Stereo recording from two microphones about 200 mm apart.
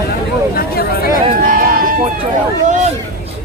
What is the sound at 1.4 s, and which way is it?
Sheep, 45° right (ahead or behind).